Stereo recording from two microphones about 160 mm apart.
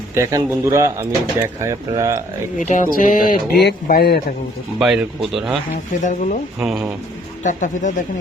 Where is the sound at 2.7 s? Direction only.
55° left (ahead or behind).